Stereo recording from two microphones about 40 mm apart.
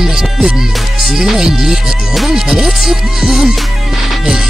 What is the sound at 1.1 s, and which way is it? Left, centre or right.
Speech, centre.